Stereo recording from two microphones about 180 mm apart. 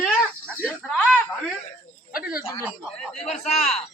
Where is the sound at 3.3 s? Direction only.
40° left (ahead or behind).